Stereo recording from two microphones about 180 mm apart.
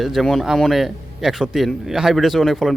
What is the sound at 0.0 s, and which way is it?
A man's voice, centre (ahead or behind).